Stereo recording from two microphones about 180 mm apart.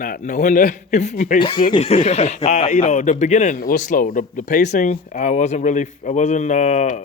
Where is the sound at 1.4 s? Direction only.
25° left (ahead or behind).